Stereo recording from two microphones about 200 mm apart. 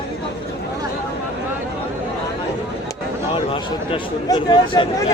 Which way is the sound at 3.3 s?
25° left (ahead or behind).